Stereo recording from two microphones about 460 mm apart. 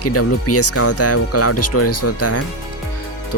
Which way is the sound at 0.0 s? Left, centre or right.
Left.